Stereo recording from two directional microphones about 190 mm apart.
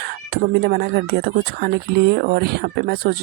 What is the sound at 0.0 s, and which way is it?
Speech, 60° right (ahead or behind).